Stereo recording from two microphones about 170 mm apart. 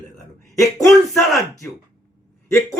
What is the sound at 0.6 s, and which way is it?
Speech, 20° left (ahead or behind).